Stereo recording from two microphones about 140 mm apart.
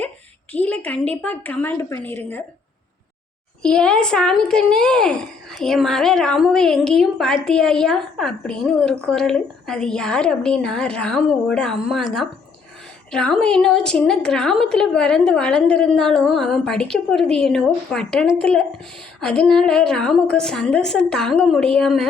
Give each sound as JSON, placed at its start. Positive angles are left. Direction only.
{"t": 0.5, "sound": "a woman's voice", "side_deg": 10}
{"t": 3.6, "sound": "a woman's voice", "side_deg": 5}